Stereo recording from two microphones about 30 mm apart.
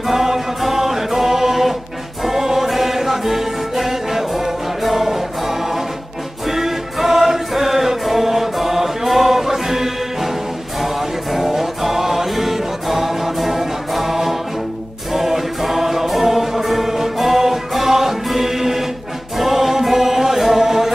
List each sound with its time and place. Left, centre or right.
0.1 s music: centre
19.3 s choir: centre